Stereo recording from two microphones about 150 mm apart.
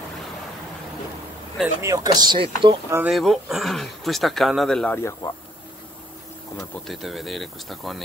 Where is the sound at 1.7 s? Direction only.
20° right (ahead or behind).